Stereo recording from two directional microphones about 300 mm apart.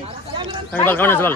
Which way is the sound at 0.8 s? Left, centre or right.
Centre.